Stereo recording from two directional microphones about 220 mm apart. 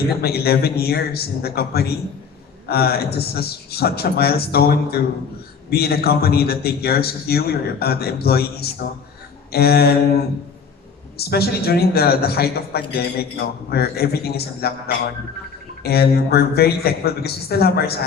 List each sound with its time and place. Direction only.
0.2 s a woman's voice: 45° left (ahead or behind)
11.2 s a woman's voice: 45° left (ahead or behind)